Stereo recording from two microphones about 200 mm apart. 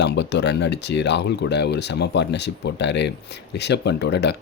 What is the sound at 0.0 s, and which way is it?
Speech, 60° left (ahead or behind).